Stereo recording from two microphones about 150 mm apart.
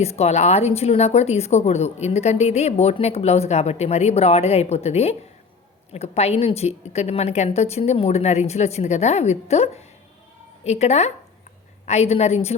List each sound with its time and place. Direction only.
0.0 s a woman's voice: 45° left (ahead or behind)